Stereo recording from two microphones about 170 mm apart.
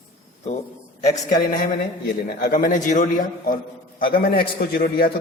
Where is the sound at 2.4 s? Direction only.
50° left (ahead or behind).